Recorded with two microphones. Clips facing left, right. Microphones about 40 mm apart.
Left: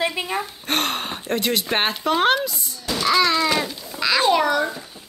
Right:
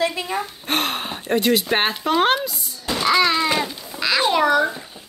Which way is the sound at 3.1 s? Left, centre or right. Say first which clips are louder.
Right 1 dB; centre.